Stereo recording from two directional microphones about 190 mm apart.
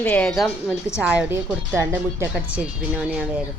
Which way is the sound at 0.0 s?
5° left (ahead or behind).